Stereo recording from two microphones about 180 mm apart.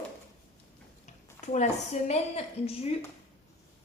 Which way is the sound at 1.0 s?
40° left (ahead or behind).